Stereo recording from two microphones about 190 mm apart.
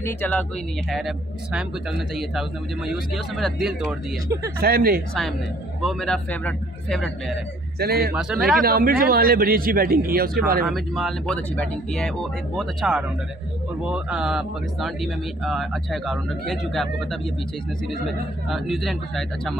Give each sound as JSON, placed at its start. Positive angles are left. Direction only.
{"t": 0.0, "sound": "speech", "side_deg": 10}
{"t": 4.6, "sound": "a man's voice", "side_deg": -50}
{"t": 5.8, "sound": "speech", "side_deg": 0}
{"t": 7.8, "sound": "a man's voice", "side_deg": -55}
{"t": 8.1, "sound": "speech", "side_deg": -5}
{"t": 8.6, "sound": "a man's voice", "side_deg": -50}
{"t": 10.7, "sound": "speech", "side_deg": 0}
{"t": 18.5, "sound": "speech", "side_deg": 0}